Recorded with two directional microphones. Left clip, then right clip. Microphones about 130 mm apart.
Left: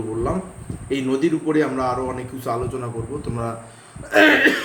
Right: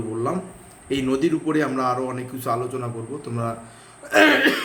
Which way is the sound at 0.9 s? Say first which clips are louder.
Left 1 dB; 25° right (ahead or behind).